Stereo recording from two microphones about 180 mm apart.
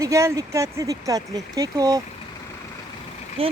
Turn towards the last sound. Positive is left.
turn(degrees=-30)  # may be behind; listen again after turning